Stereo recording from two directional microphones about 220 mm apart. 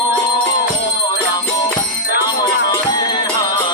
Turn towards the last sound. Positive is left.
turn(degrees=15)  # may be behind; listen again after turning